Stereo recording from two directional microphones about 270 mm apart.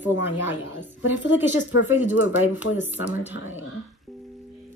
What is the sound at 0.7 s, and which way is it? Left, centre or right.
Speech, left.